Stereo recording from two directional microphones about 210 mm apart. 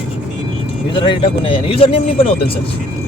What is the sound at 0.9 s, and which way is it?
Speech, 25° left (ahead or behind).